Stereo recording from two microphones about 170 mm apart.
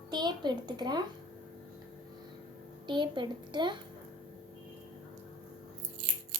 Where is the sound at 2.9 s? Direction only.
25° right (ahead or behind).